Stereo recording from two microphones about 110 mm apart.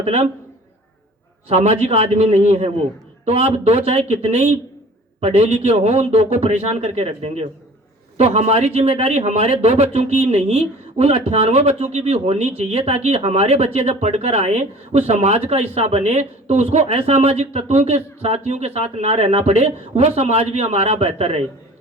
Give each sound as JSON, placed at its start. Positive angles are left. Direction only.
{"t": 0.0, "sound": "a man's voice", "side_deg": -85}
{"t": 1.5, "sound": "speech", "side_deg": -75}
{"t": 8.2, "sound": "speech", "side_deg": -90}
{"t": 13.7, "sound": "speech", "side_deg": -80}